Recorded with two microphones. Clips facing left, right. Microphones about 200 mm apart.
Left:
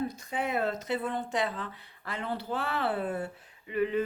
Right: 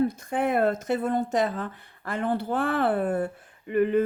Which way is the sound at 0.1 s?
50° right (ahead or behind).